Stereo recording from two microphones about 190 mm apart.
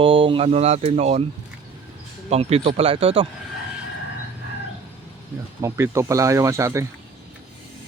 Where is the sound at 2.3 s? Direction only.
35° right (ahead or behind).